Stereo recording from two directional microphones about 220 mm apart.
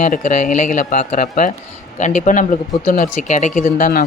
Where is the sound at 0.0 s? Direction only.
35° left (ahead or behind).